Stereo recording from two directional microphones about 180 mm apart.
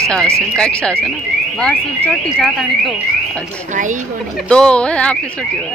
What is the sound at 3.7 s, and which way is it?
Speech, 45° right (ahead or behind).